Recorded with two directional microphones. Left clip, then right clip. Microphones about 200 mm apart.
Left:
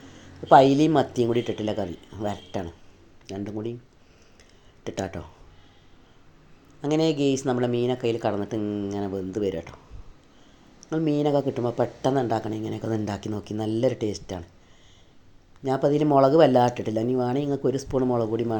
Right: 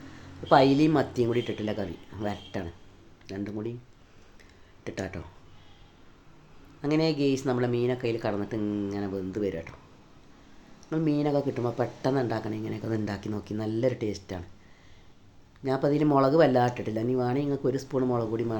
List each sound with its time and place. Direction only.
0.4 s speech: 15° left (ahead or behind)
4.8 s speech: 20° left (ahead or behind)
6.8 s speech: 15° left (ahead or behind)
10.8 s speech: 15° left (ahead or behind)
15.6 s speech: 15° left (ahead or behind)